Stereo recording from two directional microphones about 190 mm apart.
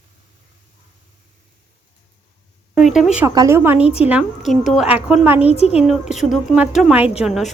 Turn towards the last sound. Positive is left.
turn(degrees=0)  # may be behind; listen again after turning